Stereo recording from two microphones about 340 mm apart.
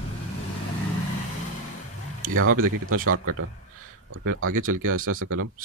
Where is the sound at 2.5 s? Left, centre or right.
Right.